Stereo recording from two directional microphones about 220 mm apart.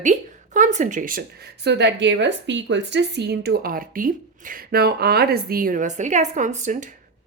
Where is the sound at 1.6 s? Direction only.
50° right (ahead or behind).